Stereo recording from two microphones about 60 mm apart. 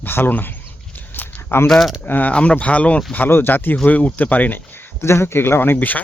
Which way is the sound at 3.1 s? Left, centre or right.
Left.